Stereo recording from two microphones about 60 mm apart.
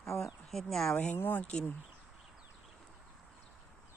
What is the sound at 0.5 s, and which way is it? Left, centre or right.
Speech, centre.